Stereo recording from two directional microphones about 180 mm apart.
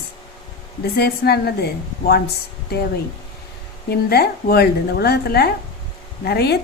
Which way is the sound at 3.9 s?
60° left (ahead or behind).